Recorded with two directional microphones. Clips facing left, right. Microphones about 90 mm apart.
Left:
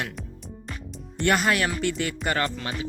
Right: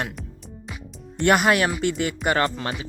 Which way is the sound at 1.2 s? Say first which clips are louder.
Right 4 dB; 50° right (ahead or behind).